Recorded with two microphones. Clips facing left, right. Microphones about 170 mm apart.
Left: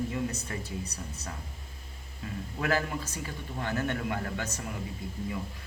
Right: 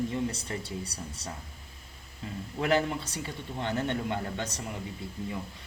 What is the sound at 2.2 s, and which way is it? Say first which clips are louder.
A man's voice: right 1 dB; 25° right (ahead or behind).